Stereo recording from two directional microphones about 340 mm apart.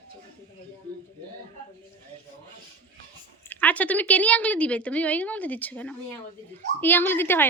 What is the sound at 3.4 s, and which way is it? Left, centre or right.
A woman's voice, centre.